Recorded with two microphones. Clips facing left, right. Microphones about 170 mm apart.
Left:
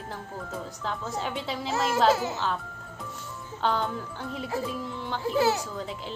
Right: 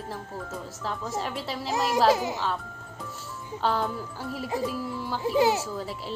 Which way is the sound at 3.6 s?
5° right (ahead or behind).